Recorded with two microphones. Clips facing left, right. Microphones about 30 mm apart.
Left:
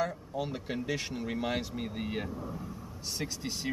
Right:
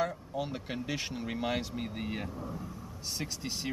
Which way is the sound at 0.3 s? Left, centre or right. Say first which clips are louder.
Left 1 dB; centre.